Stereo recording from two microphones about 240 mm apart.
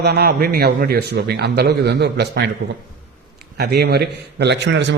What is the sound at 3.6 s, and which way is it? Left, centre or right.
A man's voice, right.